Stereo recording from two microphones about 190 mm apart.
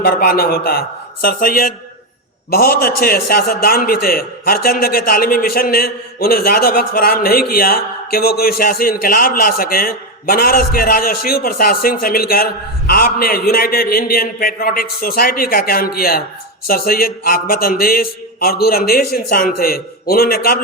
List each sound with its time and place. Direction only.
0.0 s a man's voice: 55° left (ahead or behind)